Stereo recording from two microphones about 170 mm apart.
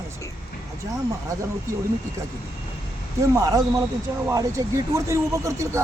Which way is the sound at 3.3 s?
20° right (ahead or behind).